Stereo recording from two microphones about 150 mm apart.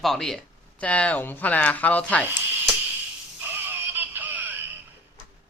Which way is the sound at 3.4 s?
15° right (ahead or behind).